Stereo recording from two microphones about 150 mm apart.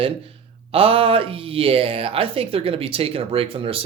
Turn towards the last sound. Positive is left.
turn(degrees=-35)  # may be behind; listen again after turning